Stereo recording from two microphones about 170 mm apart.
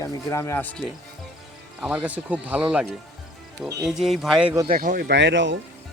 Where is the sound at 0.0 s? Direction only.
20° left (ahead or behind); by 2.8 s 5° right (ahead or behind).